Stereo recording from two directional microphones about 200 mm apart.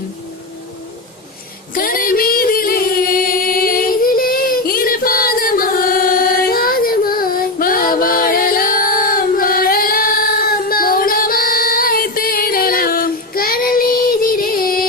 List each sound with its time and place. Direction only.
1.7 s music: 45° left (ahead or behind)
6.1 s child singing: 45° left (ahead or behind)